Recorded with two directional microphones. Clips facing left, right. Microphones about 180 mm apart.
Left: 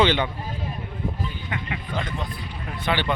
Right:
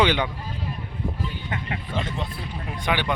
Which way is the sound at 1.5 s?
40° right (ahead or behind).